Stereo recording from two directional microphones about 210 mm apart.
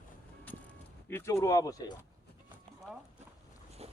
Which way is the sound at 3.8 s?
30° right (ahead or behind).